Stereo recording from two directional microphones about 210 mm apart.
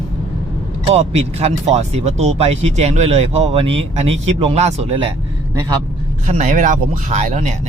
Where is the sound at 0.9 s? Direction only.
30° right (ahead or behind).